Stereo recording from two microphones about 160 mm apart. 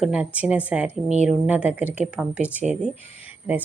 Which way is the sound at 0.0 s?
5° right (ahead or behind).